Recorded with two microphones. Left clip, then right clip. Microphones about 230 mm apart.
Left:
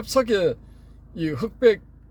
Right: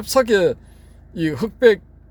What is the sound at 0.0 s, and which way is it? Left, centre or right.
Speech, right.